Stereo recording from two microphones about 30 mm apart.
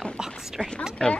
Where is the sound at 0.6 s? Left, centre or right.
Left.